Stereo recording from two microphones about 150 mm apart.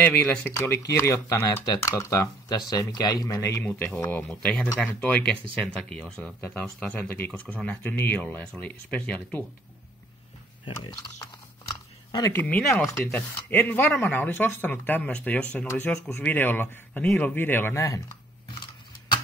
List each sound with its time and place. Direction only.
0.0 s speech: 10° left (ahead or behind)
3.6 s speech: 10° left (ahead or behind)
10.6 s a sound: 30° left (ahead or behind)
12.4 s speech: 10° left (ahead or behind)